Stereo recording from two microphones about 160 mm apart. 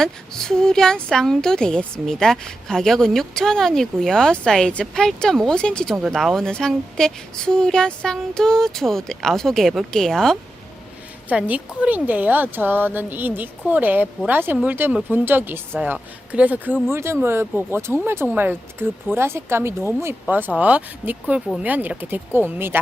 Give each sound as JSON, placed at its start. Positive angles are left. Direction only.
{"t": 0.0, "sound": "a woman's voice", "side_deg": 5}
{"t": 11.3, "sound": "speech", "side_deg": -10}